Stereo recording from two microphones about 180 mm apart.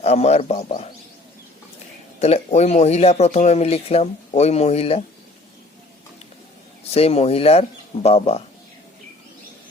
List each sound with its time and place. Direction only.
0.0 s speech: 35° left (ahead or behind)
2.1 s speech: 40° left (ahead or behind)
6.9 s speech: 35° left (ahead or behind)